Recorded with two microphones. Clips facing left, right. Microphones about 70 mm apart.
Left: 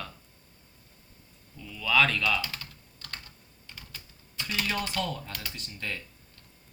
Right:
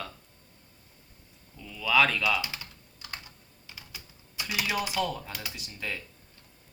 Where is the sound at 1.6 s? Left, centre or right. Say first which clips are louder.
Right 1 dB; centre.